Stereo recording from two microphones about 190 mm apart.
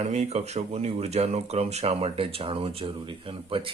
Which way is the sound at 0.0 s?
35° right (ahead or behind).